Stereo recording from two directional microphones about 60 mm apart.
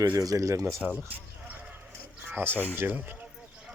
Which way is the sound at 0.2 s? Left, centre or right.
Right.